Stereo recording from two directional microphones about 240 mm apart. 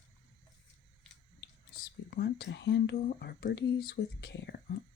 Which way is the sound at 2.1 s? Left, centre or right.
Left.